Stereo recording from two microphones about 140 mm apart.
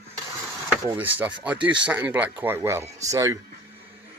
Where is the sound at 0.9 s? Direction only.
15° right (ahead or behind).